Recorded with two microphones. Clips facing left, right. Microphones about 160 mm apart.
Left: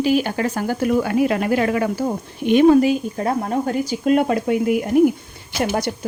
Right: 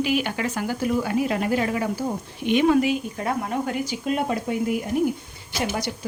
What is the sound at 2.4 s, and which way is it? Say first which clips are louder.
A woman's voice: left 6 dB; 40° left (ahead or behind).